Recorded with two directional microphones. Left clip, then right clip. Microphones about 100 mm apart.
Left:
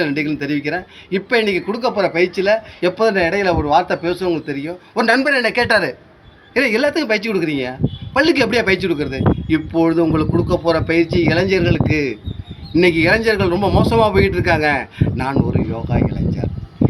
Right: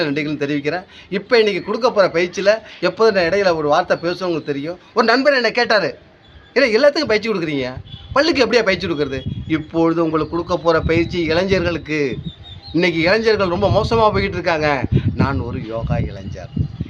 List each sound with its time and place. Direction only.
0.0 s speech: 55° right (ahead or behind)